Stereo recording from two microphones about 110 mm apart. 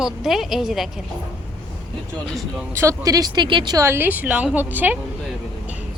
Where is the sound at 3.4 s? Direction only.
45° right (ahead or behind).